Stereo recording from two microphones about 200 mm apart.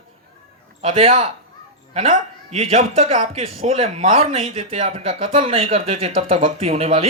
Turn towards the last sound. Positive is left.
turn(degrees=-30)  # may be behind; listen again after turning